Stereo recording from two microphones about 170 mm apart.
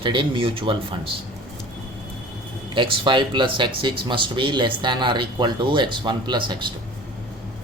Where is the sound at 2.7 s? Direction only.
30° right (ahead or behind).